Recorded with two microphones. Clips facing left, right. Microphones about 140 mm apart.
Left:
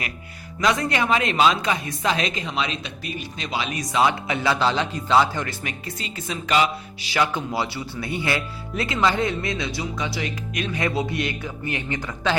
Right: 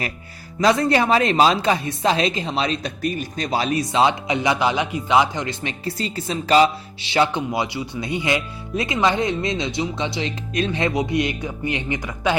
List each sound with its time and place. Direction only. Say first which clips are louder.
0.6 s a woman's voice: right 5 dB; 35° right (ahead or behind)
5.8 s speech: right 7 dB; 35° right (ahead or behind); by 12.4 s 15° right (ahead or behind)